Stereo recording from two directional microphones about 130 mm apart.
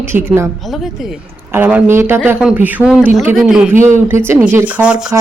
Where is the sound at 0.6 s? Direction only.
Centre (ahead or behind).